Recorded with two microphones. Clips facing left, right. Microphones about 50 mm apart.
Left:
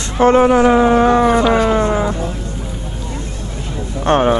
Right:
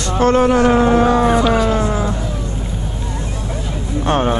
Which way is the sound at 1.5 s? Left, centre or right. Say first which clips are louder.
Left 2 dB; left.